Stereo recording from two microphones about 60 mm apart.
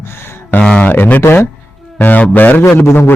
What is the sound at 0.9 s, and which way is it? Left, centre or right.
Speech, left.